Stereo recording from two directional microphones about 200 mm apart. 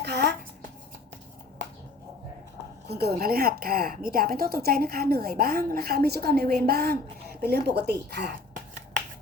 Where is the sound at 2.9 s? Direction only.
50° right (ahead or behind).